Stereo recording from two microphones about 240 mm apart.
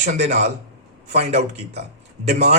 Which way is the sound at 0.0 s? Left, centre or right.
Right.